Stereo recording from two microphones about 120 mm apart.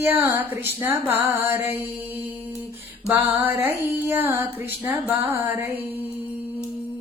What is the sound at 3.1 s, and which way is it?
Music, 20° right (ahead or behind).